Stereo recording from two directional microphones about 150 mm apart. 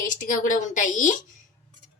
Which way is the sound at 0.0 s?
60° left (ahead or behind).